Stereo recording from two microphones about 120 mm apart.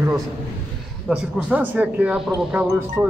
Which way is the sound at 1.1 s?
10° right (ahead or behind).